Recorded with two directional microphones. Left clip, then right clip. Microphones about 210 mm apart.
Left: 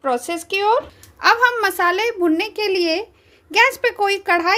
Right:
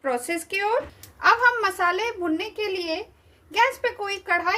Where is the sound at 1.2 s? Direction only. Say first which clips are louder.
Left 4 dB; 40° left (ahead or behind).